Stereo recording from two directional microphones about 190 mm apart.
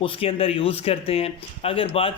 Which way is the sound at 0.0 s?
30° left (ahead or behind).